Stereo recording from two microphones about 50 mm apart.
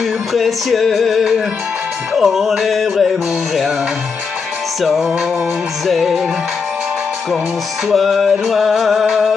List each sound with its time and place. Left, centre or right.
0.3 s music: centre
5.9 s music: centre
7.9 s music: centre